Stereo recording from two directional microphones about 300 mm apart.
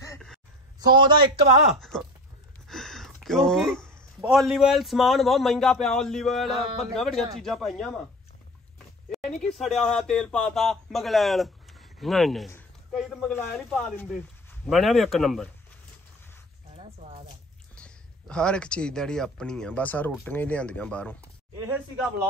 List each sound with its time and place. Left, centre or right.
0.0 s a sound: centre
0.7 s a man's voice: centre
1.8 s speech: centre
9.4 s speech: centre
16.7 s a sound: centre
17.7 s speech: centre
21.5 s a man's voice: centre